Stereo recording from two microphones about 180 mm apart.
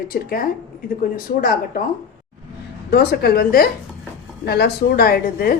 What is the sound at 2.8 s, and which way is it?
A woman's voice, 60° left (ahead or behind).